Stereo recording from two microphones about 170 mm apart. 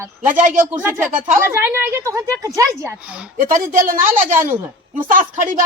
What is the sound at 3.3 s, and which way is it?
Speech, 55° right (ahead or behind).